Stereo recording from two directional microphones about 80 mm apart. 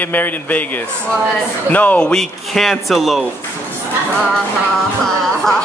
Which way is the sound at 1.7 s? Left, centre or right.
Centre.